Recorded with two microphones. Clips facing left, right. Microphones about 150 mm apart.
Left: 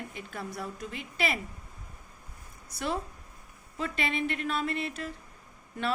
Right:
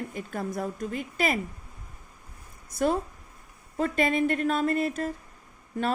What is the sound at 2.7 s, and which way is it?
A woman's voice, 50° right (ahead or behind).